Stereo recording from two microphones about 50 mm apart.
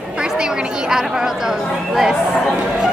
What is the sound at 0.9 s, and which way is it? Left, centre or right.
Speech, centre.